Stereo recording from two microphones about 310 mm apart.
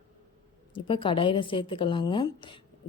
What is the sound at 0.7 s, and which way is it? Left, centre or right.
Speech, centre.